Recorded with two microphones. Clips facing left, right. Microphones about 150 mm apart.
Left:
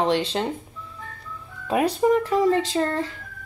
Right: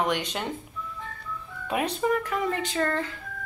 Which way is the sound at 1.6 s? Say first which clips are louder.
Left 6 dB; 30° left (ahead or behind).